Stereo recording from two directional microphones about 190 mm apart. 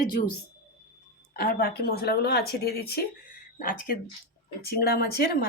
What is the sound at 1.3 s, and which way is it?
Speech, 50° left (ahead or behind).